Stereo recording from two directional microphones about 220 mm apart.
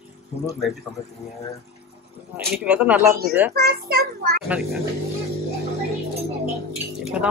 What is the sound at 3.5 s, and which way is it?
Speech, 45° right (ahead or behind).